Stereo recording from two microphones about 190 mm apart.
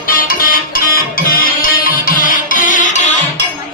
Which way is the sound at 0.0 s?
50° left (ahead or behind).